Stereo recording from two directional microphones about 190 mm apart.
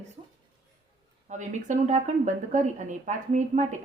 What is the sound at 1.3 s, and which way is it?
A woman's voice, 40° right (ahead or behind).